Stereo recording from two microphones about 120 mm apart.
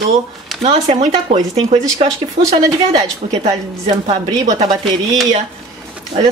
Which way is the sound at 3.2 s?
70° right (ahead or behind).